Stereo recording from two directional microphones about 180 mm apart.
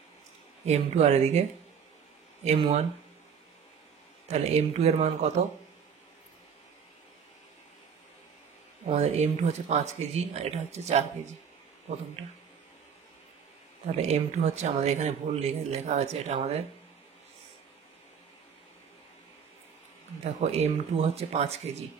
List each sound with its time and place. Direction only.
0.7 s speech: 35° right (ahead or behind)
2.4 s speech: 35° right (ahead or behind)
4.3 s speech: 35° right (ahead or behind)
8.8 s speech: 35° right (ahead or behind)
14.0 s speech: 40° right (ahead or behind)
20.3 s speech: 35° right (ahead or behind)